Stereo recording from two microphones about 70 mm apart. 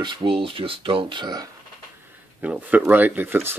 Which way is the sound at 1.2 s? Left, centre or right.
Right.